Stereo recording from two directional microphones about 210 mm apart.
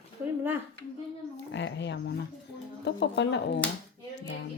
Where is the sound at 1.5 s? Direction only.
55° left (ahead or behind).